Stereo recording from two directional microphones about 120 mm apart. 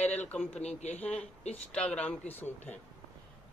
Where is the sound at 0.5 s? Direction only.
65° left (ahead or behind).